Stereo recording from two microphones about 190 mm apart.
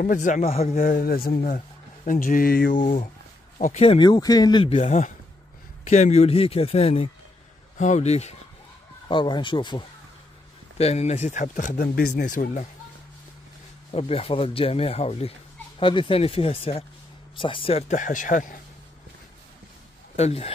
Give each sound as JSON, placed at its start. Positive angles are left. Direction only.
{"t": 0.0, "sound": "a man's voice", "side_deg": 45}
{"t": 4.7, "sound": "speech", "side_deg": 35}
{"t": 9.1, "sound": "a man's voice", "side_deg": 25}
{"t": 13.9, "sound": "speech", "side_deg": 30}
{"t": 20.2, "sound": "speech", "side_deg": 35}